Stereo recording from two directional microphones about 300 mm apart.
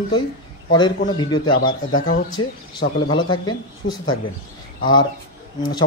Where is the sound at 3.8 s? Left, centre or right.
Left.